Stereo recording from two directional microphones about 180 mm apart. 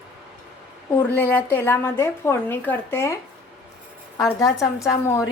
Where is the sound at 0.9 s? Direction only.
10° left (ahead or behind).